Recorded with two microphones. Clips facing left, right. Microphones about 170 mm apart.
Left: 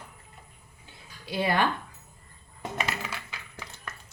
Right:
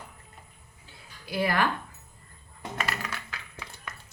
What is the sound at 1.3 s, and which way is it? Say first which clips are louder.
Speech: left 1 dB; 25° left (ahead or behind).